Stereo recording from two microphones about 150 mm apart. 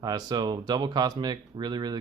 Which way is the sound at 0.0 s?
30° right (ahead or behind).